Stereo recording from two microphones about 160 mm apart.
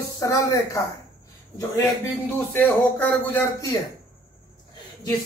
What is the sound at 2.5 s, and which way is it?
A man's voice, 10° left (ahead or behind).